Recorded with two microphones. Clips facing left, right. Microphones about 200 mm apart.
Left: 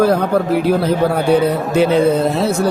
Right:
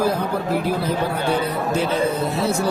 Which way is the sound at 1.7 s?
70° left (ahead or behind).